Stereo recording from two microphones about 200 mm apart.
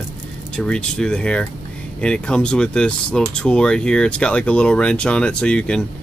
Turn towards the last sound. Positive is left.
turn(degrees=5)  # may be behind; listen again after turning